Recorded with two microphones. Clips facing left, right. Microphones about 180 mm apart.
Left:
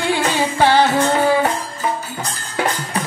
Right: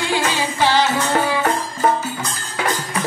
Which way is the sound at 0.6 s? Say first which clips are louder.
Left 3 dB; 55° left (ahead or behind).